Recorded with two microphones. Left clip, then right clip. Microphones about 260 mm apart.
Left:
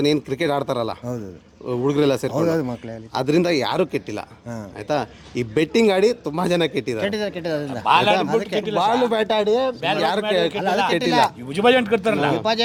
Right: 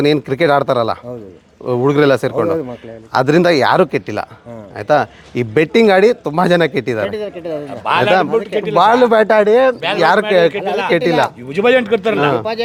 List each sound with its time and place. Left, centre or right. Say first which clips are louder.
0.0 s speech: right 7 dB; right
2.5 s speech: right 4 dB; left
3.1 s speech: right 8 dB; right
7.0 s speech: right 3 dB; left
7.9 s a man's voice: right 4 dB; right